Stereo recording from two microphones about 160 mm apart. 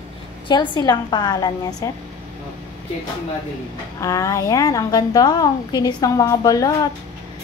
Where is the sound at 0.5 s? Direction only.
25° left (ahead or behind).